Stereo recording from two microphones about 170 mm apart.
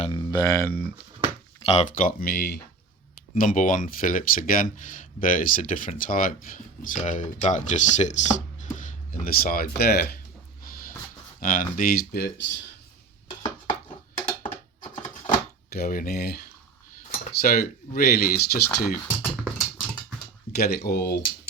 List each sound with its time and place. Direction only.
0.1 s speech: 20° left (ahead or behind)
1.5 s a sound: 35° left (ahead or behind)
2.0 s speech: 60° left (ahead or behind)
3.3 s speech: 50° left (ahead or behind); by 10.1 s 70° left (ahead or behind)
11.3 s speech: 55° left (ahead or behind)
15.7 s speech: 60° left (ahead or behind)
19.0 s typing: 10° left (ahead or behind)
20.6 s speech: 65° left (ahead or behind)